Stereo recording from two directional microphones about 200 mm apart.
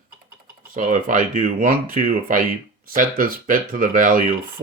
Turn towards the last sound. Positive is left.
turn(degrees=-45)  # may be behind; listen again after turning